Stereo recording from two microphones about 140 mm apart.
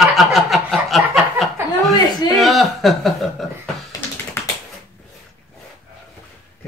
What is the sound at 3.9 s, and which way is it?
Typing, 25° left (ahead or behind).